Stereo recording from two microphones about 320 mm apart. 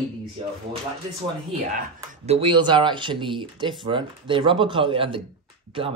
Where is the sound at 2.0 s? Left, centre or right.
Centre.